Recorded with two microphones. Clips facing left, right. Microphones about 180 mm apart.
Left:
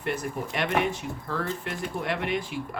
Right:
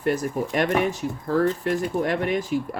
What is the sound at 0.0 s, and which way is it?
Speech, 40° right (ahead or behind).